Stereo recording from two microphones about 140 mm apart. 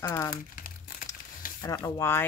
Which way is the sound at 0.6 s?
90° left.